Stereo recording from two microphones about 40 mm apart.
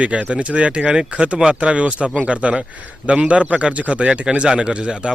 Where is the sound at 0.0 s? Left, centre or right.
Right.